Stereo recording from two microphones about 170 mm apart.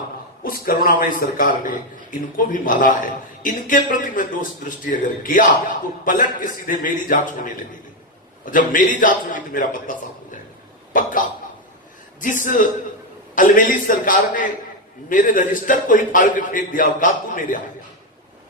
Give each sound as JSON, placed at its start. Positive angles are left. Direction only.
{"t": 0.4, "sound": "a man's voice", "side_deg": 55}
{"t": 12.2, "sound": "a man's voice", "side_deg": 50}